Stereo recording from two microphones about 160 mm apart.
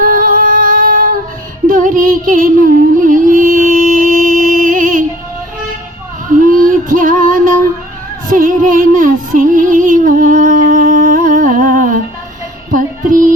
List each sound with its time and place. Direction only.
0.0 s female singing: 60° right (ahead or behind)
1.6 s music: 60° right (ahead or behind)
6.2 s female singing: 55° right (ahead or behind)
8.3 s music: 60° right (ahead or behind)